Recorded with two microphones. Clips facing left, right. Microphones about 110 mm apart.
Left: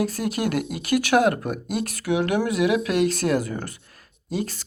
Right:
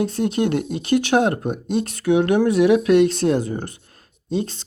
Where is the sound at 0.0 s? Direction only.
25° right (ahead or behind).